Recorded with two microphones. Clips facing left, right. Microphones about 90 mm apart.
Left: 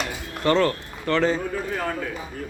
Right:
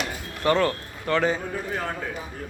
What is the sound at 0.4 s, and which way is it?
Speech, 15° right (ahead or behind).